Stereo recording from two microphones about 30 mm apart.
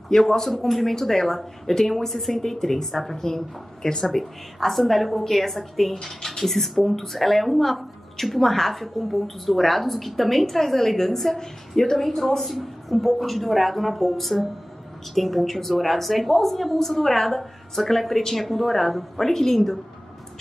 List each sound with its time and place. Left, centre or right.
0.2 s speech: centre
4.2 s a woman's voice: centre
12.4 s a woman's voice: centre